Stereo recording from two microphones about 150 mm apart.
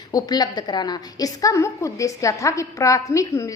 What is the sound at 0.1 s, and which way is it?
A woman's voice, 25° left (ahead or behind).